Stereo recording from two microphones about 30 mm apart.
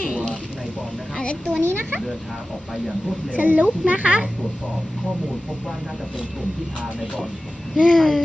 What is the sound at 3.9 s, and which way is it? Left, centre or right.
Speech, right.